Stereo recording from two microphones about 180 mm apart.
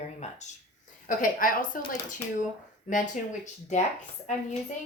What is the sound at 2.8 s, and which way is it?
Speech, 45° left (ahead or behind).